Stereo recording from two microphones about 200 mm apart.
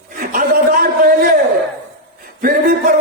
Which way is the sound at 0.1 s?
45° right (ahead or behind).